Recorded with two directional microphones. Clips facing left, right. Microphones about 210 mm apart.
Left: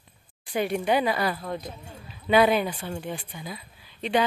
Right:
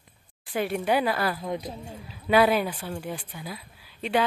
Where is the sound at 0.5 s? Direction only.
5° right (ahead or behind).